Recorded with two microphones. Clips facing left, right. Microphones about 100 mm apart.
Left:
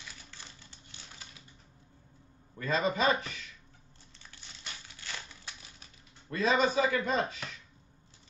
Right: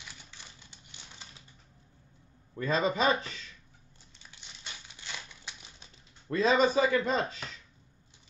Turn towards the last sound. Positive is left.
turn(degrees=-30)  # may be behind; listen again after turning